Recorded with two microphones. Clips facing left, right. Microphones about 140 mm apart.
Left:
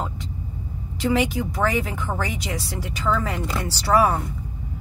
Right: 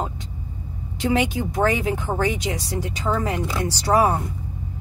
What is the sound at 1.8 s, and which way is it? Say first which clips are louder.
Speech: right 3 dB; 25° right (ahead or behind).